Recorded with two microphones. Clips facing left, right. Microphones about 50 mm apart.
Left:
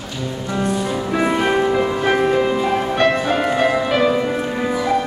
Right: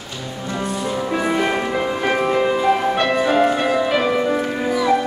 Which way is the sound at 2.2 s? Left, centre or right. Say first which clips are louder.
Even; centre.